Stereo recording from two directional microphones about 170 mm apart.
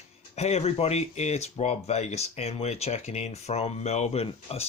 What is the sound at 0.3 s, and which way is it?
Speech, 40° left (ahead or behind).